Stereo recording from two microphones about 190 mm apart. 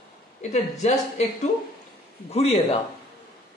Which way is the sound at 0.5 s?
35° left (ahead or behind).